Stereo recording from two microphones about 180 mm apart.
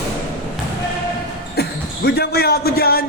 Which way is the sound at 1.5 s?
65° left (ahead or behind).